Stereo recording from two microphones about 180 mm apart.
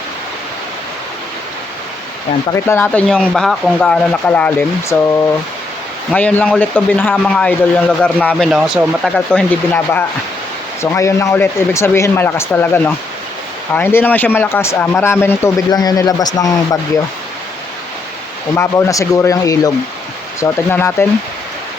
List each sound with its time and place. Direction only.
2.5 s speech: 15° left (ahead or behind)
6.1 s speech: 5° left (ahead or behind)
18.5 s speech: 15° left (ahead or behind)